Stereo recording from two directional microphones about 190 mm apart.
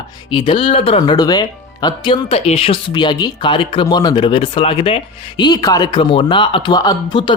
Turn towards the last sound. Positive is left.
turn(degrees=25)  # may be behind; listen again after turning